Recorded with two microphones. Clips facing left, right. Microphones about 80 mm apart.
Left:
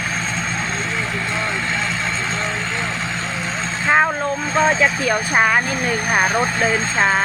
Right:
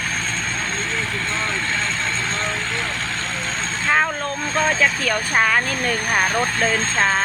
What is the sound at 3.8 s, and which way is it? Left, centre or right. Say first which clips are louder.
Speech: left 4 dB; centre.